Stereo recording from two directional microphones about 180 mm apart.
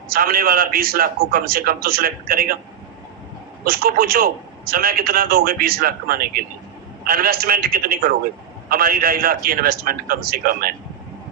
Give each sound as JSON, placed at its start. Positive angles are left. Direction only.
{"t": 0.1, "sound": "a man's voice", "side_deg": -55}
{"t": 3.6, "sound": "a man's voice", "side_deg": -55}